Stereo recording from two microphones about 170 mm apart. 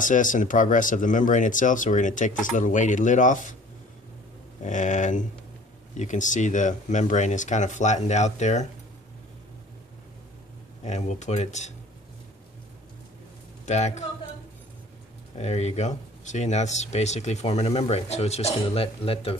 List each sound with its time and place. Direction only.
0.0 s speech: 50° left (ahead or behind)
4.6 s speech: 45° left (ahead or behind)
10.8 s speech: 40° left (ahead or behind)
13.7 s speech: 40° left (ahead or behind)
15.3 s speech: 40° left (ahead or behind)